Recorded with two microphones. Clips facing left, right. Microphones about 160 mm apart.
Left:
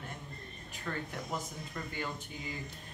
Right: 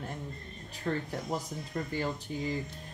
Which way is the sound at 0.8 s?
35° right (ahead or behind).